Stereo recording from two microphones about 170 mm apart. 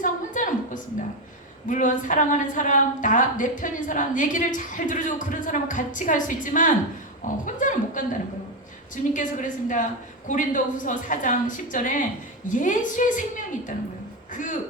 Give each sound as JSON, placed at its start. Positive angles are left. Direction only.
{"t": 0.0, "sound": "a sound", "side_deg": 50}
{"t": 1.6, "sound": "a woman's voice", "side_deg": 50}
{"t": 9.1, "sound": "a woman's voice", "side_deg": 50}